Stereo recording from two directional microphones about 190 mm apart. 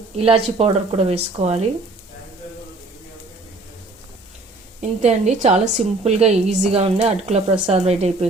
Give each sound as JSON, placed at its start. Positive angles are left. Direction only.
{"t": 0.2, "sound": "a woman's voice", "side_deg": -30}
{"t": 4.8, "sound": "a woman's voice", "side_deg": -35}